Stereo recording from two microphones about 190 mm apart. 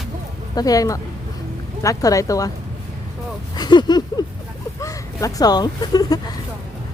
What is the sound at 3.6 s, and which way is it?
Speech, 20° left (ahead or behind).